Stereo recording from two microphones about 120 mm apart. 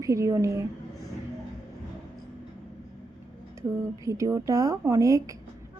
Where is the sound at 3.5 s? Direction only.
25° right (ahead or behind).